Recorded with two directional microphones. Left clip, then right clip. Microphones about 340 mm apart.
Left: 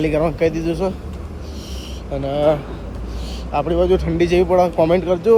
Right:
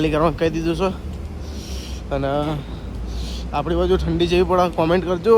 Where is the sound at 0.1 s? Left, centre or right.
Right.